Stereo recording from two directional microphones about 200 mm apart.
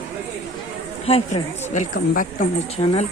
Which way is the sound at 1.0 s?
30° left (ahead or behind).